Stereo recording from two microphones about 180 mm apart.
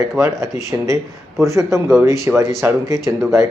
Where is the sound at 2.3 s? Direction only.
15° right (ahead or behind).